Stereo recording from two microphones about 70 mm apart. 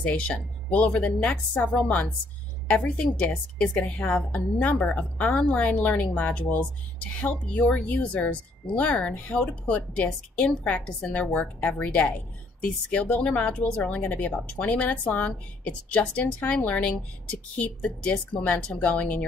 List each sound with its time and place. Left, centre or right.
0.0 s a woman's voice: centre
2.7 s a woman's voice: centre